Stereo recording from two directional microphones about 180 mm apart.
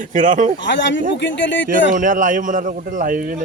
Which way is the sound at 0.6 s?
80° left.